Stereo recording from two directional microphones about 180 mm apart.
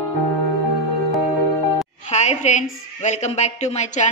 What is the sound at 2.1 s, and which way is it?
A woman's voice, 40° left (ahead or behind).